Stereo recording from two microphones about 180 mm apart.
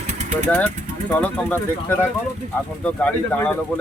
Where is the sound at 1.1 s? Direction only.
10° left (ahead or behind).